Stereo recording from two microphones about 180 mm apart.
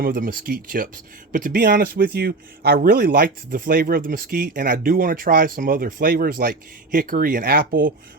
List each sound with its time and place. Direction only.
0.0 s speech: 50° right (ahead or behind)